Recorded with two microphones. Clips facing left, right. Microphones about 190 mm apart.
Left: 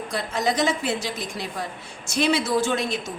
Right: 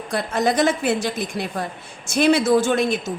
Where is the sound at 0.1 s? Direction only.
55° right (ahead or behind).